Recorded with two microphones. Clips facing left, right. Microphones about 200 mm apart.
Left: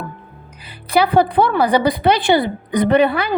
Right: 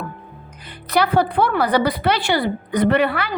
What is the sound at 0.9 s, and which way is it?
A woman's voice, 10° left (ahead or behind).